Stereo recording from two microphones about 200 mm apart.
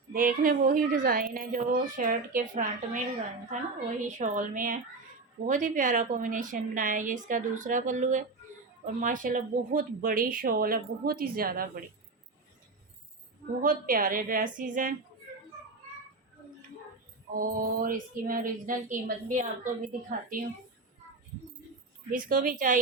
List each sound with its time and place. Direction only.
0.1 s a woman's voice: 45° right (ahead or behind)
13.6 s a woman's voice: 45° right (ahead or behind)
17.3 s a woman's voice: 45° right (ahead or behind)
22.1 s a woman's voice: 40° right (ahead or behind)